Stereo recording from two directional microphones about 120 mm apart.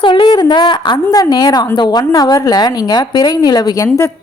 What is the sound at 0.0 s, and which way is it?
A woman's voice, 40° left (ahead or behind).